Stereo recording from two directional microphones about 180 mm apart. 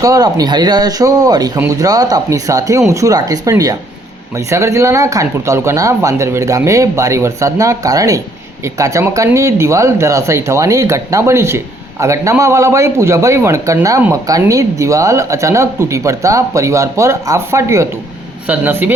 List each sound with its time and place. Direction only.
0.0 s speech: 20° right (ahead or behind)